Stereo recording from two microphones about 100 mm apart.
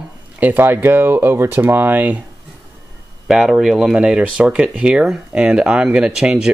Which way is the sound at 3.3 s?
5° right (ahead or behind).